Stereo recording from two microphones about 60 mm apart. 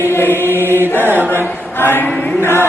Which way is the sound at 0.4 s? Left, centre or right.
Right.